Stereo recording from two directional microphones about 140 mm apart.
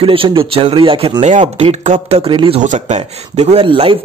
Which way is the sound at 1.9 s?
45° right (ahead or behind).